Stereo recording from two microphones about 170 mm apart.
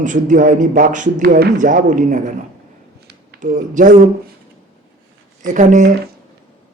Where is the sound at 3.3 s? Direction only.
50° right (ahead or behind).